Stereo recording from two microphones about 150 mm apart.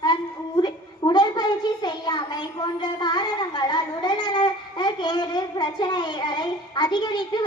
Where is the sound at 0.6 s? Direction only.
30° left (ahead or behind).